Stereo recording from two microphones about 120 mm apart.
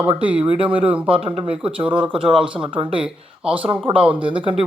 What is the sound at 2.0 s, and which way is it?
Speech, 45° right (ahead or behind).